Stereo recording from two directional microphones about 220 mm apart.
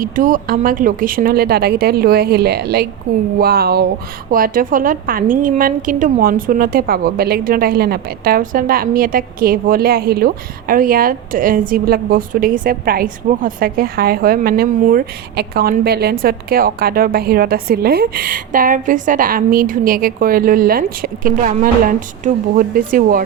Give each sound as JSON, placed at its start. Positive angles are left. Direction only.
{"t": 0.0, "sound": "a woman's voice", "side_deg": -35}